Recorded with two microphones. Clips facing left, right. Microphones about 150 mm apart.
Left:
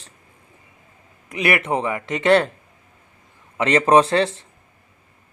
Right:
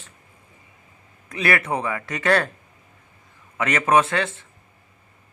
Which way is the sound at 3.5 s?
25° left (ahead or behind).